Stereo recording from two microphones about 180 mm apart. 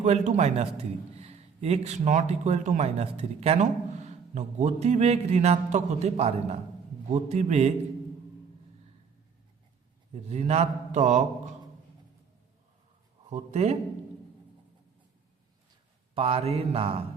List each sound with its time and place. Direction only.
0.0 s a man's voice: 40° right (ahead or behind)
10.1 s a man's voice: 35° right (ahead or behind)
13.3 s a man's voice: 35° right (ahead or behind)
16.1 s a man's voice: 30° right (ahead or behind)